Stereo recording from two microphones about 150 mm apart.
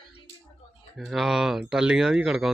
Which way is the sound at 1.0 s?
Centre (ahead or behind).